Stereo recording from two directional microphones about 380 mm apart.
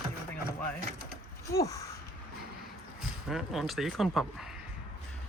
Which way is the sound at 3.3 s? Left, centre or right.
Centre.